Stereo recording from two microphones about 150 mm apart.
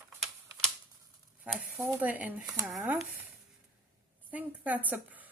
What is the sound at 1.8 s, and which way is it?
Speech, 10° right (ahead or behind).